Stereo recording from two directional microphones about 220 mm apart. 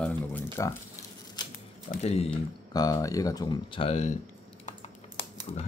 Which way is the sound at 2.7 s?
15° left (ahead or behind).